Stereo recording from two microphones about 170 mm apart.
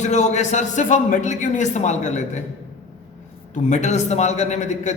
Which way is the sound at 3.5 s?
45° left (ahead or behind).